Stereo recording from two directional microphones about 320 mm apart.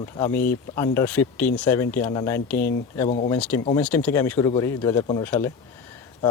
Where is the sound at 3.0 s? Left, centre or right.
Left.